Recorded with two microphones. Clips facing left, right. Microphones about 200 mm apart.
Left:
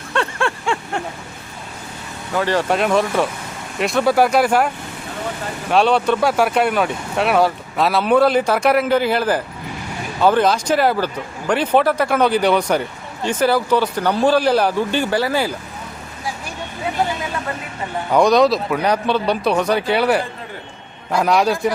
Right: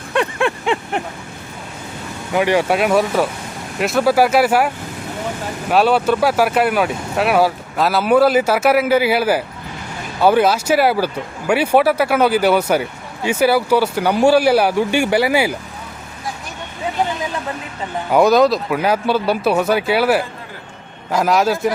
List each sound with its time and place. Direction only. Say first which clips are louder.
0.1 s a sound: right 3 dB; 15° right (ahead or behind)
2.3 s speech: right 3 dB; 15° right (ahead or behind)
5.7 s speech: right 1 dB; 5° right (ahead or behind)
18.1 s speech: right 1 dB; 5° right (ahead or behind)